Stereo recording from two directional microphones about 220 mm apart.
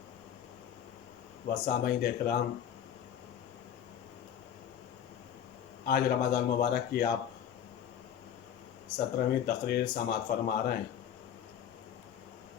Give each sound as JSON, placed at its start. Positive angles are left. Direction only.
{"t": 1.5, "sound": "a man's voice", "side_deg": 45}
{"t": 5.8, "sound": "a man's voice", "side_deg": 45}
{"t": 9.0, "sound": "a man's voice", "side_deg": 45}